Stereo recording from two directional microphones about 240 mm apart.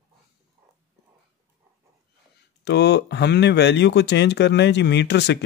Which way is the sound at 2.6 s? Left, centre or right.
Left.